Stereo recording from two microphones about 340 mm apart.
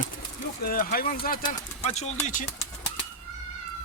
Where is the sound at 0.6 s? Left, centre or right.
Left.